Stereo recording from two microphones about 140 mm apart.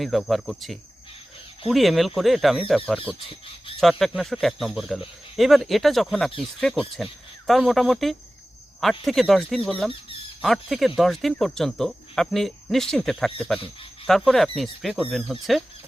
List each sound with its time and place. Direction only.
0.0 s speech: centre (ahead or behind)
3.2 s speech: 40° left (ahead or behind)
3.8 s speech: centre (ahead or behind)